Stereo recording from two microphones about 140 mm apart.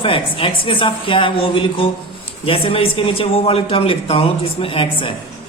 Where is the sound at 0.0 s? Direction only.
40° left (ahead or behind).